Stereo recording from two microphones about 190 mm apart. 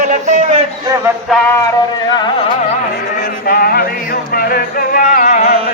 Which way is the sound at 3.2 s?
50° left (ahead or behind).